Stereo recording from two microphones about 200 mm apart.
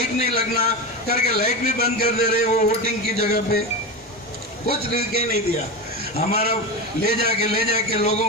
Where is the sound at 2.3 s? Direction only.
35° left (ahead or behind).